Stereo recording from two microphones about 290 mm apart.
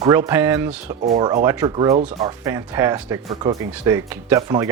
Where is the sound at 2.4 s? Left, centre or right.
Centre.